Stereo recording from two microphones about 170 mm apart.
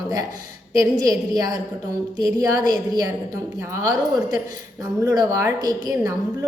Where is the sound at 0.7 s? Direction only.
20° right (ahead or behind).